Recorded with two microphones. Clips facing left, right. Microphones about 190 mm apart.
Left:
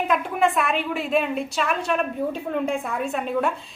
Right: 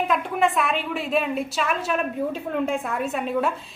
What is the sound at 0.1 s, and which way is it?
A woman's voice, centre (ahead or behind).